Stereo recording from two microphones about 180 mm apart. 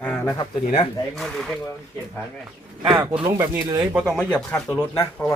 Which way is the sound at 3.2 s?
15° right (ahead or behind).